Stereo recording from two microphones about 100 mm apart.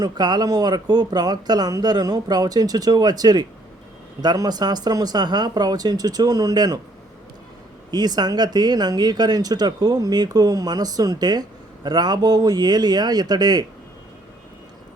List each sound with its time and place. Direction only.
0.0 s speech: 45° right (ahead or behind)
7.9 s speech: 45° right (ahead or behind)